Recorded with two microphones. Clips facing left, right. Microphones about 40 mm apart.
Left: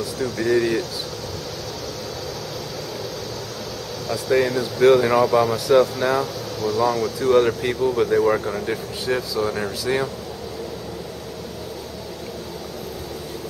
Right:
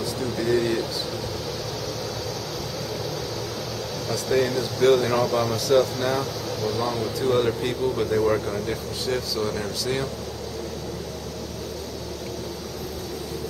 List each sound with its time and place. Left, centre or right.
0.2 s speech: centre
4.1 s speech: centre
7.2 s speech: centre